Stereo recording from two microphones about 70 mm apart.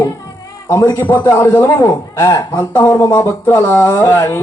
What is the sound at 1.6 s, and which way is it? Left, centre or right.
Speech, left.